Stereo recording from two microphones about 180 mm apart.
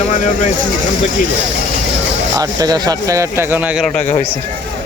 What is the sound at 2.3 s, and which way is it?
Speech, 20° right (ahead or behind).